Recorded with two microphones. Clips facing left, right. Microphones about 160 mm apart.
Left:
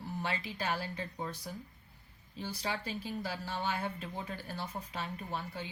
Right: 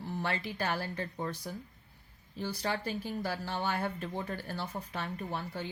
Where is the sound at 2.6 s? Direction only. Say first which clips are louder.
Right 3 dB; 50° right (ahead or behind).